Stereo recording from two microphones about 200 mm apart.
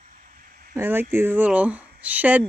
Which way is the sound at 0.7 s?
10° right (ahead or behind).